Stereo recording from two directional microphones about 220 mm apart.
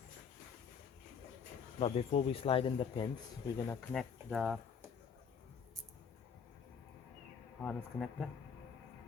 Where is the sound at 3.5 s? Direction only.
10° left (ahead or behind).